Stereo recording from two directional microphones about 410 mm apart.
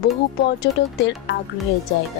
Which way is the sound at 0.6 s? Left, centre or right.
Left.